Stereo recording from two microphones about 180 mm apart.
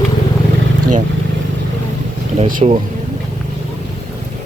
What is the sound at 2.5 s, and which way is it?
Speech, 35° right (ahead or behind).